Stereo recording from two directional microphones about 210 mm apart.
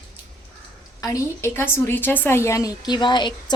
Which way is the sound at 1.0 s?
15° left (ahead or behind).